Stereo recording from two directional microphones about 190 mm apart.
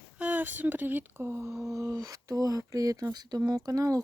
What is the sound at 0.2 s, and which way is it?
Speech, 10° right (ahead or behind).